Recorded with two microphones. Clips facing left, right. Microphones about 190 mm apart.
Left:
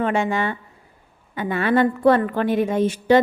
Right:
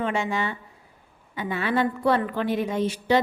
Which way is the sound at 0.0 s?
55° left (ahead or behind).